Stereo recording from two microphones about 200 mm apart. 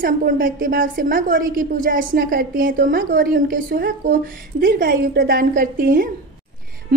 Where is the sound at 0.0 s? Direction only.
45° right (ahead or behind).